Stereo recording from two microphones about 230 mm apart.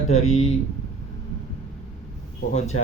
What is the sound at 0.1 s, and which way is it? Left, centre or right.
Speech, left.